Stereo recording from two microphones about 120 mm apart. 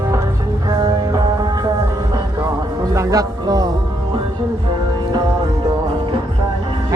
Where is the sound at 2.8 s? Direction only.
30° right (ahead or behind).